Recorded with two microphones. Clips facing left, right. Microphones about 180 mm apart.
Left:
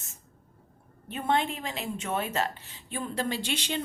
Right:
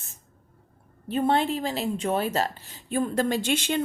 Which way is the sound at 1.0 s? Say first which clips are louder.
Right 5 dB; 35° right (ahead or behind).